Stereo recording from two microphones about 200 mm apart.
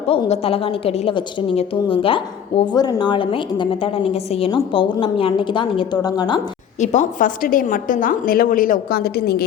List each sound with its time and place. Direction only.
0.1 s a woman's voice: 30° left (ahead or behind)
6.7 s a woman's voice: 35° left (ahead or behind); by 9.4 s 50° left (ahead or behind)